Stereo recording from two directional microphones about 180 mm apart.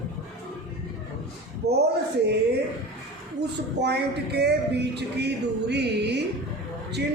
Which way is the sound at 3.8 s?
70° right (ahead or behind).